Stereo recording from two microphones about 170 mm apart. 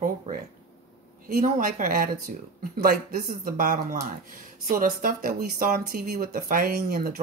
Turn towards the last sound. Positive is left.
turn(degrees=-55)  # may be behind; listen again after turning